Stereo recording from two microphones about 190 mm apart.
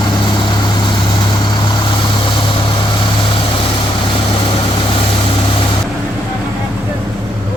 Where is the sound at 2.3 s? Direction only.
25° left (ahead or behind).